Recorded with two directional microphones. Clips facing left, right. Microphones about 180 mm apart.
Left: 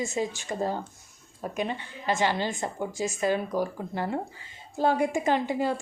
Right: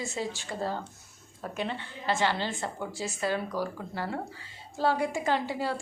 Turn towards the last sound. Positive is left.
turn(degrees=20)  # may be behind; listen again after turning